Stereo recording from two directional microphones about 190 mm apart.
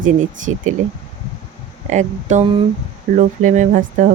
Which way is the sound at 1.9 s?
40° right (ahead or behind).